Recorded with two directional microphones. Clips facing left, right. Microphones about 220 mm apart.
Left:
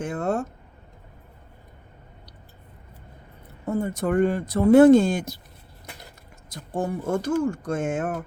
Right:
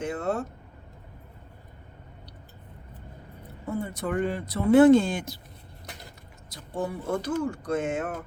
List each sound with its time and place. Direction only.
0.0 s speech: 50° left (ahead or behind)
3.7 s speech: 45° left (ahead or behind)
6.5 s speech: 45° left (ahead or behind)